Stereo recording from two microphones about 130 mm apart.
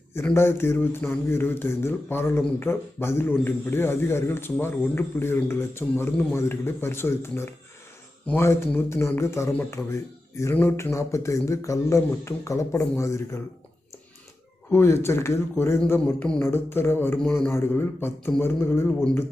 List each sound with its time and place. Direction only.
0.3 s speech: 20° left (ahead or behind)
14.7 s speech: 20° left (ahead or behind)
17.2 s speech: 5° left (ahead or behind)
17.5 s speech: 20° left (ahead or behind)